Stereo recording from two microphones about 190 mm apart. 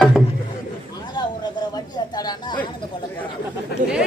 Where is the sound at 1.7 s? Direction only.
20° left (ahead or behind).